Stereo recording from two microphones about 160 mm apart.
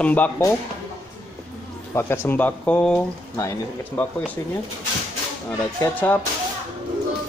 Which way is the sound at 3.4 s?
20° left (ahead or behind).